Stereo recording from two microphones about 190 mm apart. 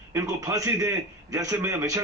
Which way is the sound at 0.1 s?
15° right (ahead or behind).